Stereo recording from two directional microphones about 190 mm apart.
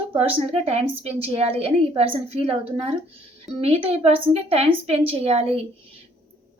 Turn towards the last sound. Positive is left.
turn(degrees=-30)  # may be behind; listen again after turning